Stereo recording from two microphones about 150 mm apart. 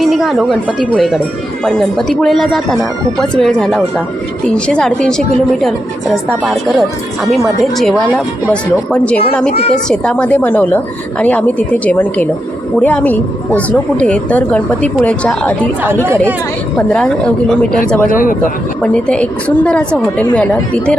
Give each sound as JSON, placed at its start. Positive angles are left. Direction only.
{"t": 0.0, "sound": "speech", "side_deg": 0}
{"t": 9.9, "sound": "speech", "side_deg": 5}
{"t": 16.7, "sound": "speech", "side_deg": 5}
{"t": 18.0, "sound": "speech", "side_deg": 65}
{"t": 18.8, "sound": "speech", "side_deg": 5}